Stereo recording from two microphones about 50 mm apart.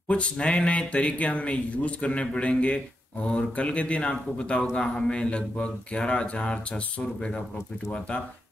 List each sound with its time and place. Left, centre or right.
0.1 s speech: left